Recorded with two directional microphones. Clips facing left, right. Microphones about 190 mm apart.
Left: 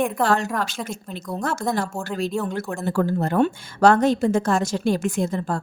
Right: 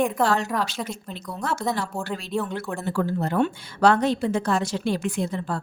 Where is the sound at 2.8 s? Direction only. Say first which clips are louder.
Left 4 dB; 45° left (ahead or behind).